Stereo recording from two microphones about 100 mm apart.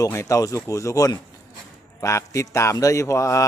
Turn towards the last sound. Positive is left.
turn(degrees=30)  # may be behind; listen again after turning